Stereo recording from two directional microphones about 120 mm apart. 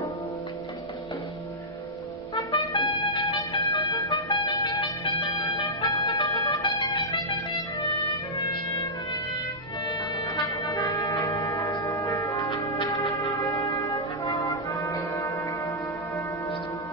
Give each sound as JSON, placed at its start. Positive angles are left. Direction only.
{"t": 2.5, "sound": "music", "side_deg": 40}
{"t": 9.8, "sound": "music", "side_deg": 40}
{"t": 10.8, "sound": "church bell", "side_deg": 35}
{"t": 14.2, "sound": "music", "side_deg": 25}